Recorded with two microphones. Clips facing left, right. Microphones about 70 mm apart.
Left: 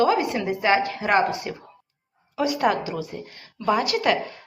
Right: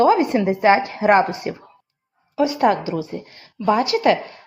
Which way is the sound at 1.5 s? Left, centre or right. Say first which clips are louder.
Right 5 dB; right.